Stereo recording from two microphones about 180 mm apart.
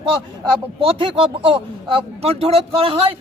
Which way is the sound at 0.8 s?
30° right (ahead or behind).